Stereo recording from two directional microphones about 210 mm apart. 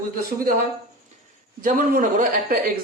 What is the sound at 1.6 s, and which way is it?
Speech, 40° right (ahead or behind).